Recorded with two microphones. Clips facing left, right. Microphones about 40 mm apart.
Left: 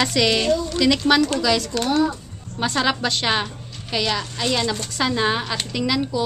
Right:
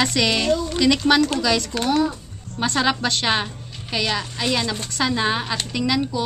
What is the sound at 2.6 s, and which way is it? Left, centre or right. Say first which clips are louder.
Speech: even; centre.